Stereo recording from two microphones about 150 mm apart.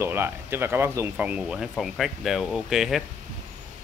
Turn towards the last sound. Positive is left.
turn(degrees=-5)  # may be behind; listen again after turning